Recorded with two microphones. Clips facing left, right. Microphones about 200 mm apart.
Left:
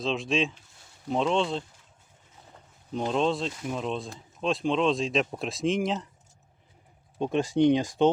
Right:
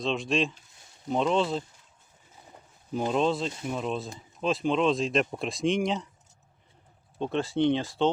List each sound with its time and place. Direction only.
0.0 s speech: centre (ahead or behind)
2.9 s speech: 5° right (ahead or behind)
7.2 s speech: 15° left (ahead or behind)